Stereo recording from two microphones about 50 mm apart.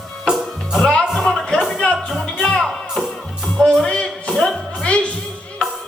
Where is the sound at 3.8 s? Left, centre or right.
Centre.